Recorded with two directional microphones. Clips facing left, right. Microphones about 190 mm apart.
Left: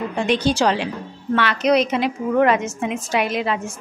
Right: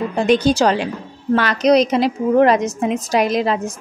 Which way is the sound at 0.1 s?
40° right (ahead or behind).